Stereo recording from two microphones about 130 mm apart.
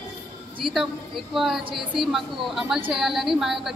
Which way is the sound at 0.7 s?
Centre (ahead or behind).